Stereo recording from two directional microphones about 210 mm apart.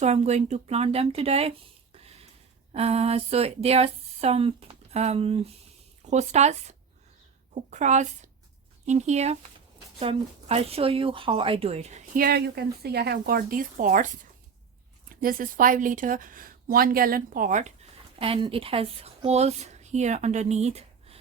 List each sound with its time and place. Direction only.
0.0 s speech: 30° right (ahead or behind)
2.7 s speech: 30° right (ahead or behind)
18.2 s a woman's voice: 25° right (ahead or behind)